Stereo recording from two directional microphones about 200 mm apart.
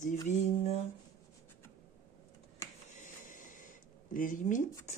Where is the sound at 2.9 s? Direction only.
40° left (ahead or behind).